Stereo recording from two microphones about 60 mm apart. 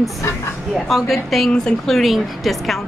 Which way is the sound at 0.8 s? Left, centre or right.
Centre.